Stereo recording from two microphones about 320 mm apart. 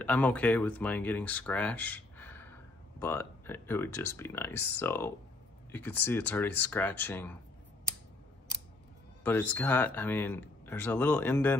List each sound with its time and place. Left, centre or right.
0.0 s speech: centre
9.2 s speech: centre